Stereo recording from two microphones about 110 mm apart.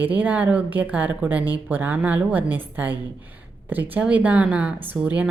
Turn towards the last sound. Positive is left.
turn(degrees=-10)  # may be behind; listen again after turning